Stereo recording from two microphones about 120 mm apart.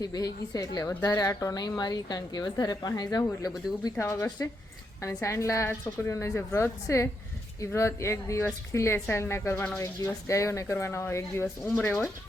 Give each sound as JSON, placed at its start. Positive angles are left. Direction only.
{"t": 0.0, "sound": "a woman's voice", "side_deg": 30}
{"t": 3.9, "sound": "speech", "side_deg": 20}